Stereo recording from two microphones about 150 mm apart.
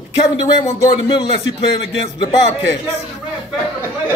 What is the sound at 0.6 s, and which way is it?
Speech, 30° left (ahead or behind).